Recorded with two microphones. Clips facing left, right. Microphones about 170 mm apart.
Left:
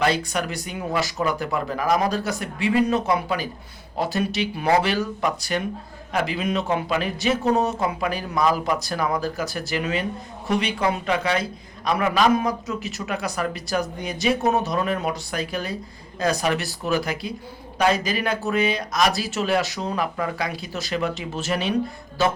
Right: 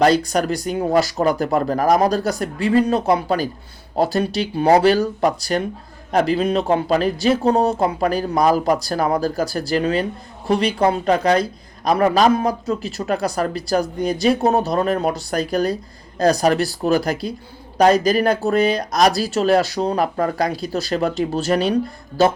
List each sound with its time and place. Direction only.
0.0 s speech: 40° right (ahead or behind)